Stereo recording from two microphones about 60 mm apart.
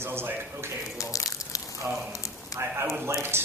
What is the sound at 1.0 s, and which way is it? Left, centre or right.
Crushing, left.